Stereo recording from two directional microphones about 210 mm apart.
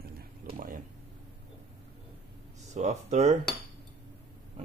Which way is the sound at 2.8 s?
30° right (ahead or behind).